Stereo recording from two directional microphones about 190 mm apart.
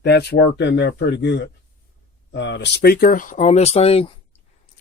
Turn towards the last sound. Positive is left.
turn(degrees=30)  # may be behind; listen again after turning